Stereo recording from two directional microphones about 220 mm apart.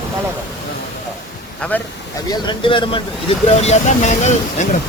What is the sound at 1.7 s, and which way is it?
Speech, 5° left (ahead or behind).